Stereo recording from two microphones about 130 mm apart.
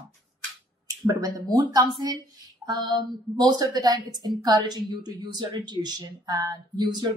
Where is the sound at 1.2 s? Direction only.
30° right (ahead or behind).